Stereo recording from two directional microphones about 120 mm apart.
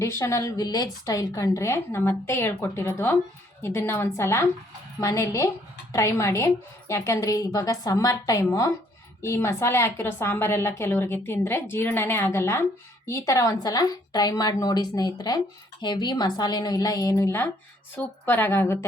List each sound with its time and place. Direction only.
0.0 s a woman's voice: 25° left (ahead or behind)